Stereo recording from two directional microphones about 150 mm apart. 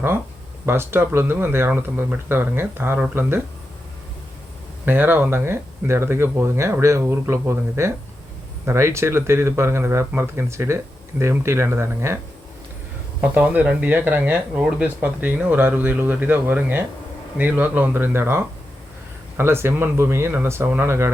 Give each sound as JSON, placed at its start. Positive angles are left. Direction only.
{"t": 0.6, "sound": "speech", "side_deg": -15}
{"t": 4.9, "sound": "speech", "side_deg": -15}
{"t": 13.2, "sound": "speech", "side_deg": -10}